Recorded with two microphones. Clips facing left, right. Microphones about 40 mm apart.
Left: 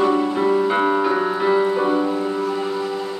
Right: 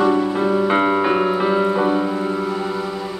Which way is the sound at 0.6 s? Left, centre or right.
Right.